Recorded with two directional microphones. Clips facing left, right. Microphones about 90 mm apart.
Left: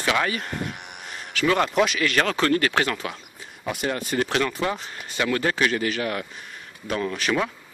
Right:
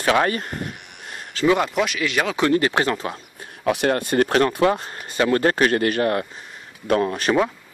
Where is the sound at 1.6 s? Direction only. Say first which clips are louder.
Left 1 dB; centre (ahead or behind); by 3.2 s 30° right (ahead or behind).